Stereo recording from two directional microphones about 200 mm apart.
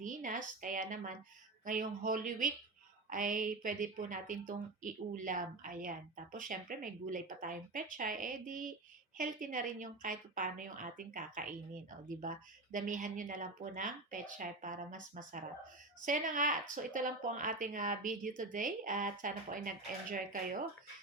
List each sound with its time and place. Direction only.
0.0 s a woman's voice: 40° right (ahead or behind)